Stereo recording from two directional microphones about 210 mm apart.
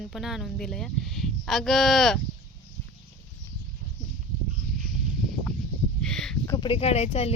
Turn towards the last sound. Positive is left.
turn(degrees=30)  # may be behind; listen again after turning